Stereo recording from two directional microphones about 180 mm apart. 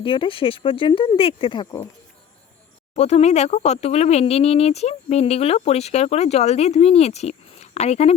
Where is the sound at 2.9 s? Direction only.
35° left (ahead or behind).